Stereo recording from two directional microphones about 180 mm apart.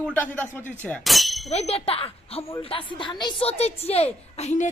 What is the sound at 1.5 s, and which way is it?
A woman's voice, 35° left (ahead or behind).